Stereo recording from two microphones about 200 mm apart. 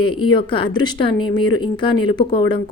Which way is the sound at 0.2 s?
25° left (ahead or behind).